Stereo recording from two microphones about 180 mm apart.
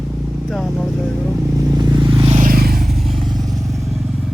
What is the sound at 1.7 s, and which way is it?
Vehicle, 25° right (ahead or behind).